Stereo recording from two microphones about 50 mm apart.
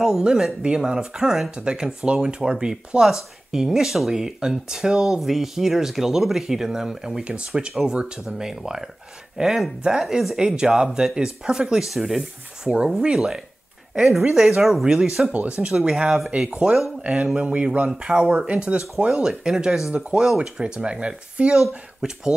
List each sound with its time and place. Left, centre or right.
0.0 s speech: centre
12.6 s speech: centre
13.9 s speech: centre
17.4 s speech: right